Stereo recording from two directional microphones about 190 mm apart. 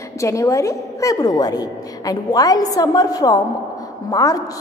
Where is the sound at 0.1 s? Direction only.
15° left (ahead or behind).